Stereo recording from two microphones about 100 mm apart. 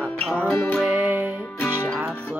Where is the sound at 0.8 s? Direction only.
15° right (ahead or behind).